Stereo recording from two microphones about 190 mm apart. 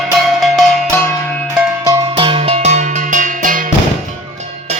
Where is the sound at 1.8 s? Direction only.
20° right (ahead or behind); by 3.7 s 45° right (ahead or behind).